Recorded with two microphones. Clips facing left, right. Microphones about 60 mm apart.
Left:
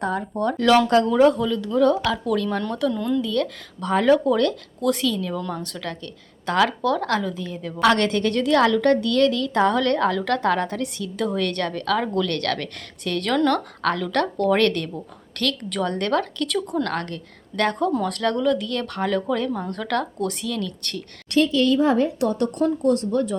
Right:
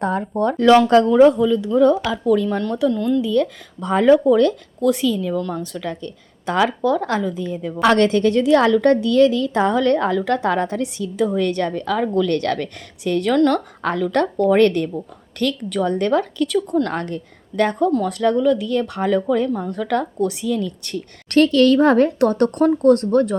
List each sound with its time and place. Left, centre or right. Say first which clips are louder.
0.0 s speech: right 4 dB; right
1.1 s a woman's voice: right 5 dB; centre
4.8 s speech: right 4 dB; centre
7.4 s a woman's voice: right 2 dB; right; by 16.6 s centre
16.8 s a woman's voice: right 3 dB; right
17.6 s a woman's voice: right 4 dB; centre
21.2 s speech: right 5 dB; right